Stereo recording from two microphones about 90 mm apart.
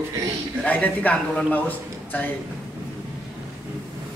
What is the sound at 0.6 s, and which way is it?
A man's voice, 15° left (ahead or behind).